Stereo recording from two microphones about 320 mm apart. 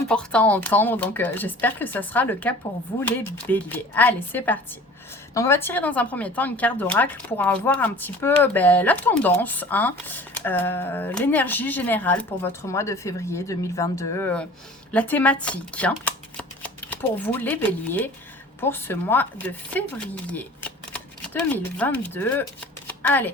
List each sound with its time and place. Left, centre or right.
0.1 s speech: centre
20.3 s a sound: centre
21.5 s speech: centre
22.9 s shuffling cards: centre